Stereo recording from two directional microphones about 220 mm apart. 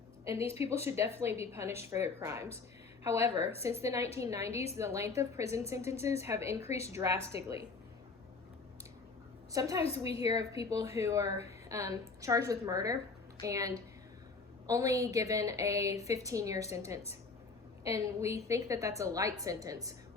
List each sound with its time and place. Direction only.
0.4 s a woman's voice: 25° left (ahead or behind)
0.9 s a woman's voice: 10° right (ahead or behind)
9.5 s a woman's voice: 15° right (ahead or behind)
9.8 s a woman's voice: 25° left (ahead or behind)
10.2 s a woman's voice: 15° right (ahead or behind)